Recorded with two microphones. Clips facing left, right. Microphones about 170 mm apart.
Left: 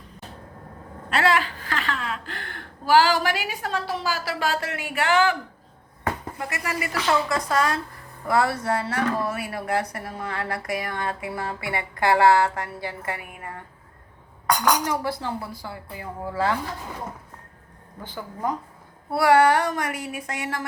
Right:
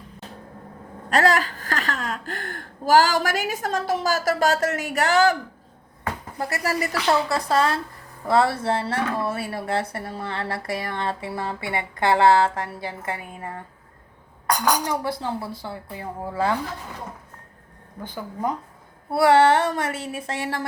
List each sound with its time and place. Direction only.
1.1 s speech: 40° right (ahead or behind)
6.4 s speech: 40° right (ahead or behind)
14.8 s speech: 20° right (ahead or behind)
19.1 s speech: 25° right (ahead or behind)